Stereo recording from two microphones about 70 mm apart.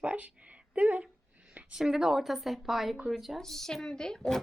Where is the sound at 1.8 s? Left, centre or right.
Centre.